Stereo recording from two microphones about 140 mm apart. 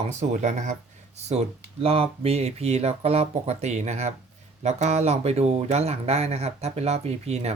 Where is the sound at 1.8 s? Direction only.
45° right (ahead or behind).